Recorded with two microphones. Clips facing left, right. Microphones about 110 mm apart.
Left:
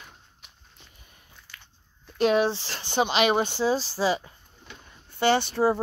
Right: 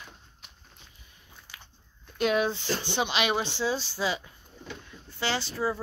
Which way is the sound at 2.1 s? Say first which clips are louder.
Left 4 dB; 35° left (ahead or behind).